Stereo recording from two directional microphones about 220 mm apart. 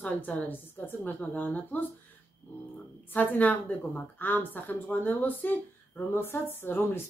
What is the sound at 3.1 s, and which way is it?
A woman's voice, 5° left (ahead or behind).